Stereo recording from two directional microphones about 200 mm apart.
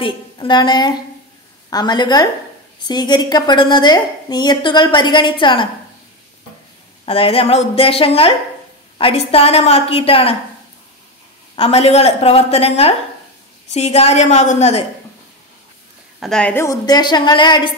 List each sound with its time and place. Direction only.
0.0 s a woman's voice: 25° left (ahead or behind)
7.1 s a woman's voice: 30° left (ahead or behind)
11.5 s a woman's voice: 30° left (ahead or behind)
16.2 s a woman's voice: 5° left (ahead or behind); by 17.7 s 25° left (ahead or behind)